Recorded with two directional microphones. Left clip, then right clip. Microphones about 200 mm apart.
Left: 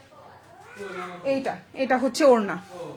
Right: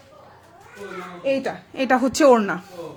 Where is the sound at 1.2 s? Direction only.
35° right (ahead or behind).